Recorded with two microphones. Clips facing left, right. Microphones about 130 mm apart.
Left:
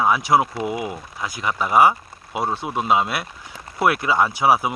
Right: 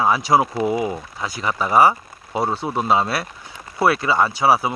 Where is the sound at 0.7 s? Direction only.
35° right (ahead or behind).